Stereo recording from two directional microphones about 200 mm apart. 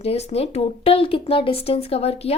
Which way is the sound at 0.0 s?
30° left (ahead or behind).